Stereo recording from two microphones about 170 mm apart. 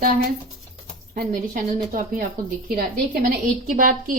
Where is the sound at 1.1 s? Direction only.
50° right (ahead or behind).